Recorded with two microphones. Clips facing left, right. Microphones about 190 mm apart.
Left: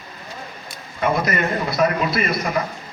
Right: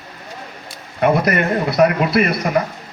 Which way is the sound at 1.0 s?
65° right (ahead or behind).